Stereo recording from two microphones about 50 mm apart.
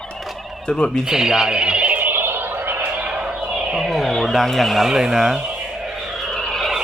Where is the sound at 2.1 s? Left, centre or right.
Right.